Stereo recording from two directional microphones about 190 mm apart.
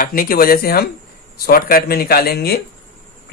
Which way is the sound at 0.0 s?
50° left (ahead or behind).